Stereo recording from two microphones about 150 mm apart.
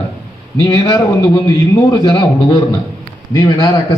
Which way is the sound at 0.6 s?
25° left (ahead or behind).